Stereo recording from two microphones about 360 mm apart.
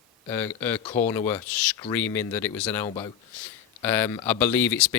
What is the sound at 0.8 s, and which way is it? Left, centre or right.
Speech, centre.